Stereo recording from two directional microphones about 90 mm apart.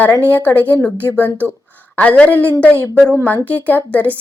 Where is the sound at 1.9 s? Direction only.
15° left (ahead or behind).